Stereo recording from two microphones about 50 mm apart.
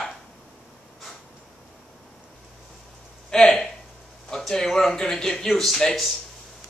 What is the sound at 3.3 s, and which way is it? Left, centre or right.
A man's voice, centre.